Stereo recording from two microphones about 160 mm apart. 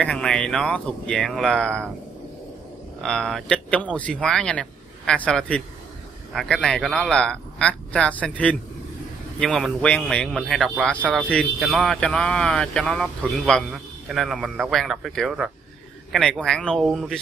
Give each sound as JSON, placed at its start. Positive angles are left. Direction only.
{"t": 0.0, "sound": "speech", "side_deg": 5}
{"t": 3.0, "sound": "speech", "side_deg": 5}